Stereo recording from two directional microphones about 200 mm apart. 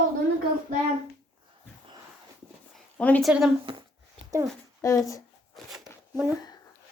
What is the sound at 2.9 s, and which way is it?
Speech, 5° left (ahead or behind).